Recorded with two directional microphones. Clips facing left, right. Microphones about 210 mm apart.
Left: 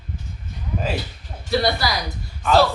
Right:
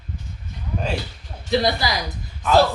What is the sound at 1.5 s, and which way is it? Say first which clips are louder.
Speech: even; 20° right (ahead or behind).